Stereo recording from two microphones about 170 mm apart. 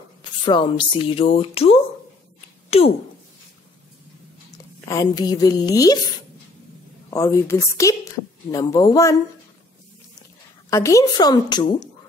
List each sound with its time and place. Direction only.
0.2 s speech: 25° left (ahead or behind)
4.5 s speech: 20° left (ahead or behind)
7.1 s a woman's voice: 20° left (ahead or behind)
10.7 s a woman's voice: 20° left (ahead or behind)